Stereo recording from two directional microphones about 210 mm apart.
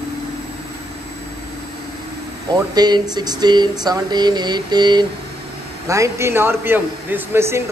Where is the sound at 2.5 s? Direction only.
20° right (ahead or behind).